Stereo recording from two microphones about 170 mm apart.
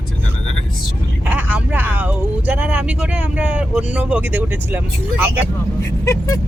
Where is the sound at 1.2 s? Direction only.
10° right (ahead or behind).